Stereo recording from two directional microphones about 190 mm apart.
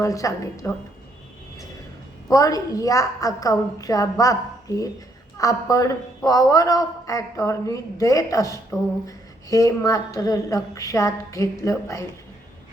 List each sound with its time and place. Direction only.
0.0 s speech: 15° left (ahead or behind)
2.3 s speech: 20° left (ahead or behind)